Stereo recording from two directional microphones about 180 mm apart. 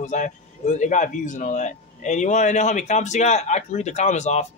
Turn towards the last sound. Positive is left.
turn(degrees=40)  # may be behind; listen again after turning